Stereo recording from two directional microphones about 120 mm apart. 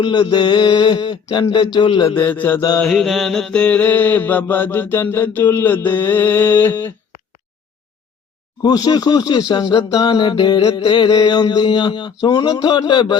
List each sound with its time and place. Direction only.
0.0 s mantra: 40° left (ahead or behind)
2.0 s mantra: 15° left (ahead or behind)
2.6 s mantra: 30° left (ahead or behind)
2.8 s mantra: 5° left (ahead or behind)
8.6 s mantra: 35° left (ahead or behind)